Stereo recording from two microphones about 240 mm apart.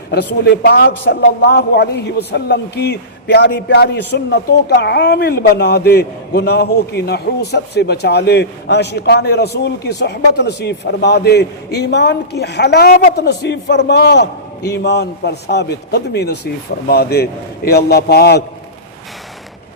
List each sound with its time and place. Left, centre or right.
0.1 s a man's voice: left